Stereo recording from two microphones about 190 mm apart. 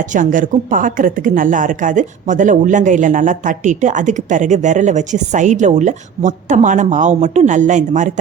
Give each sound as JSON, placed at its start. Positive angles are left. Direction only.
{"t": 0.1, "sound": "speech", "side_deg": -45}